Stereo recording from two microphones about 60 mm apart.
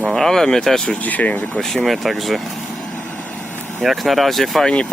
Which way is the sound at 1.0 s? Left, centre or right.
Left.